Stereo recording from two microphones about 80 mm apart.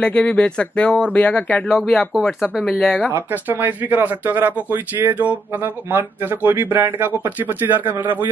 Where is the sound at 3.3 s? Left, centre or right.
Right.